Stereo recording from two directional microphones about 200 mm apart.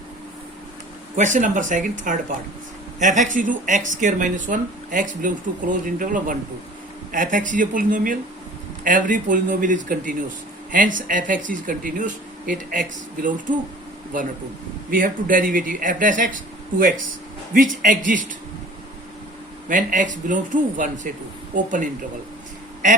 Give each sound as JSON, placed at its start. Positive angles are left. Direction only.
{"t": 1.1, "sound": "speech", "side_deg": -40}
{"t": 14.8, "sound": "speech", "side_deg": -45}
{"t": 19.6, "sound": "speech", "side_deg": -40}